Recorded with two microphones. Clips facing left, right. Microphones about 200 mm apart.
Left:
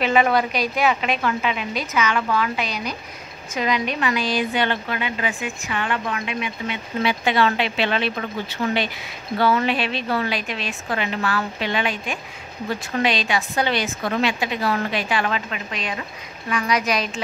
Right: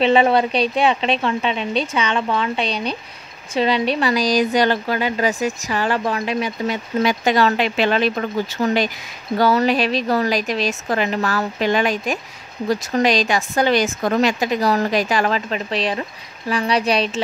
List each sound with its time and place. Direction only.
0.0 s a woman's voice: 30° right (ahead or behind)